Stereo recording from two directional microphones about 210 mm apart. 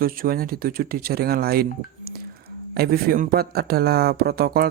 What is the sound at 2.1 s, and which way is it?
Drip, 45° right (ahead or behind).